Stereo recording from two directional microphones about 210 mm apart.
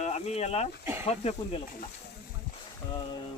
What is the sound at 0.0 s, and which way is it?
Speech, 30° left (ahead or behind).